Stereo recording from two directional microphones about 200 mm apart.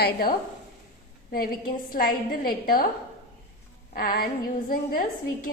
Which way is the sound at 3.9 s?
45° left (ahead or behind).